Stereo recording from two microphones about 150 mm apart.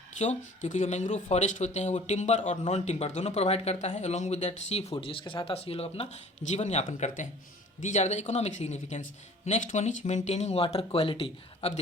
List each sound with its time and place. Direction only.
0.2 s speech: 55° left (ahead or behind)